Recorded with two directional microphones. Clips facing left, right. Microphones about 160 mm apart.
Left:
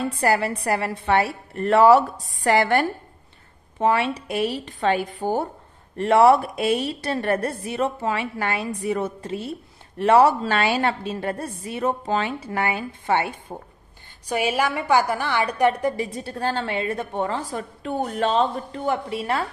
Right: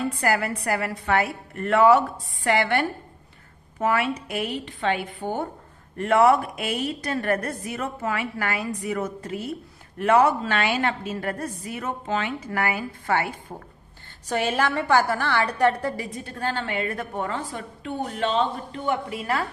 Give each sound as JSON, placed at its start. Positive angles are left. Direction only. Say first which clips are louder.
{"t": 0.2, "sound": "a woman's voice", "louder": "left 5 dB", "side_deg": 30}
{"t": 3.8, "sound": "a woman's voice", "louder": "left 3 dB", "side_deg": 30}
{"t": 14.2, "sound": "a woman's voice", "louder": "left 1 dB", "side_deg": 10}
{"t": 16.1, "sound": "a woman's voice", "louder": "left 3 dB", "side_deg": 30}
{"t": 18.9, "sound": "a woman's voice", "louder": "left 1 dB", "side_deg": 30}